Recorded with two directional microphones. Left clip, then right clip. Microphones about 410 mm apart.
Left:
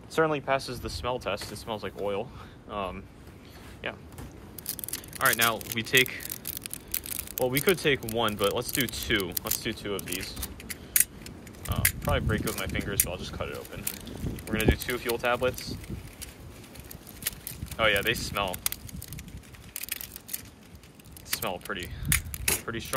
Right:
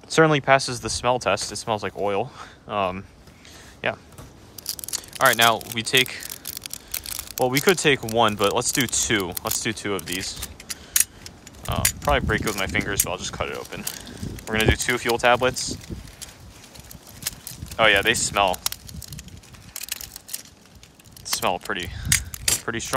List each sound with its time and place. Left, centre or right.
0.1 s speech: right
4.6 s a sound: centre
8.1 s speech: centre
17.7 s speech: centre
19.7 s typing: centre
21.3 s speech: centre
22.1 s keys jangling: centre